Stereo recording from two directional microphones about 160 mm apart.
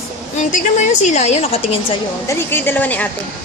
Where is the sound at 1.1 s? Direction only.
45° left (ahead or behind).